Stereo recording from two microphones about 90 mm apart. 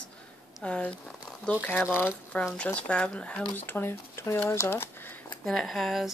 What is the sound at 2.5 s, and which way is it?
Speech, 15° left (ahead or behind).